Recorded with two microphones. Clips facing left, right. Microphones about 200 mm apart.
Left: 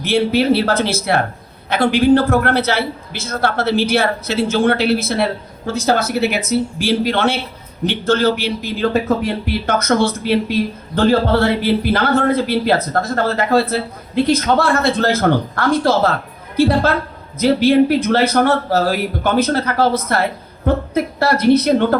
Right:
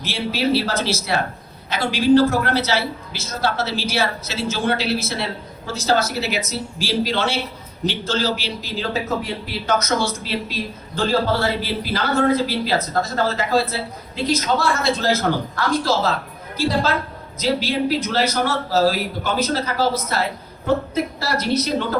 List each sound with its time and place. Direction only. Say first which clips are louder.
0.0 s a man's voice: left 7 dB; 55° left (ahead or behind)